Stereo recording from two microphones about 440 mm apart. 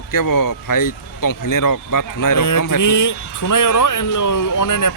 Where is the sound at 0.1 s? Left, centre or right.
Left.